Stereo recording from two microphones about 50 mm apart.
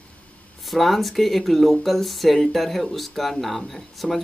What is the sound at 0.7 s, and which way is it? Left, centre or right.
Speech, centre.